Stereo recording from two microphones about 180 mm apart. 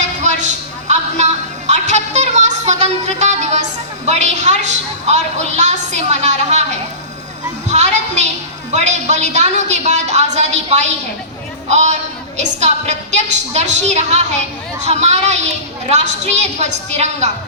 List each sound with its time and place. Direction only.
0.2 s a sound: 40° right (ahead or behind)
7.7 s music: 40° right (ahead or behind)
8.7 s a woman's voice: 40° right (ahead or behind)